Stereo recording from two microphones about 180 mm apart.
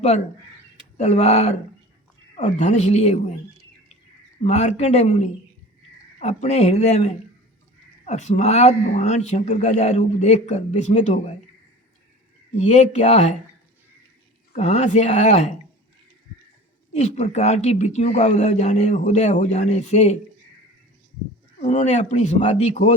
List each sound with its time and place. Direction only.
0.9 s speech: 35° left (ahead or behind)
4.4 s speech: 35° left (ahead or behind)
12.5 s speech: 35° left (ahead or behind)
14.5 s speech: 35° left (ahead or behind)
16.9 s speech: 40° left (ahead or behind)
21.6 s speech: 35° left (ahead or behind)